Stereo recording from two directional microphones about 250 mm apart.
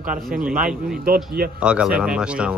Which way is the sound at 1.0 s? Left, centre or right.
Right.